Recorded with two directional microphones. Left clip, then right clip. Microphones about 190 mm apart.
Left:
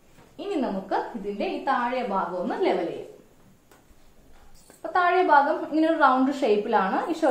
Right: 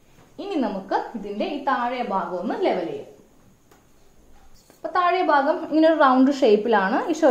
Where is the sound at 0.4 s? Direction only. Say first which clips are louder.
Even; 40° right (ahead or behind).